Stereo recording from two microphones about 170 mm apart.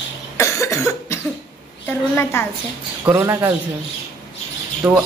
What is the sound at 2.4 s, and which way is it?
Speech, 15° left (ahead or behind).